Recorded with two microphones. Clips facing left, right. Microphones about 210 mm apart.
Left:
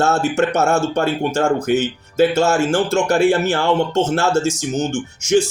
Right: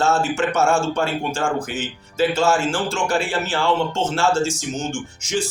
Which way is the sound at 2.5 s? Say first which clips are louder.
Left 5 dB; 65° left (ahead or behind).